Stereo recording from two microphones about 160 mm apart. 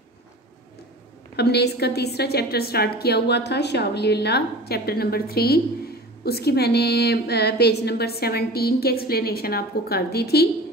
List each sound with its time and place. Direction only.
1.3 s a woman's voice: 90° left